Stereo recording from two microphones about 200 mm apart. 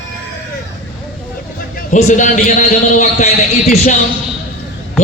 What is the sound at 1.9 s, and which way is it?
A man's voice, 40° left (ahead or behind).